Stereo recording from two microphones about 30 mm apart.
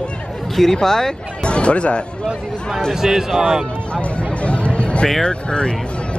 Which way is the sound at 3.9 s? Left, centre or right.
Left.